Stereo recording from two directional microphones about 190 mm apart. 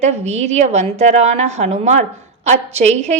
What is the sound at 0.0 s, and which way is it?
A woman's voice, 35° right (ahead or behind).